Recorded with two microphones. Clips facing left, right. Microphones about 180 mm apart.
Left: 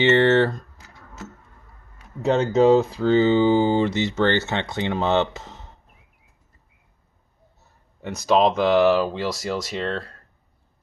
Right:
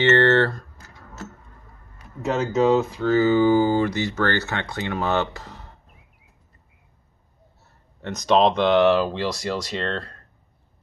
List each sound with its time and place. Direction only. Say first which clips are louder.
0.0 s speech: left 1 dB; 15° left (ahead or behind)
2.2 s speech: left 3 dB; 30° left (ahead or behind)
8.0 s speech: even; 10° left (ahead or behind)